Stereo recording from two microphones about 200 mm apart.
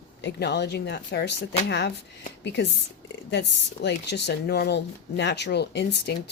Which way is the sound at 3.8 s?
60° left (ahead or behind).